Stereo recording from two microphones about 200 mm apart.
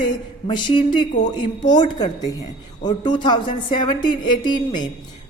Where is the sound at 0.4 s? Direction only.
25° left (ahead or behind).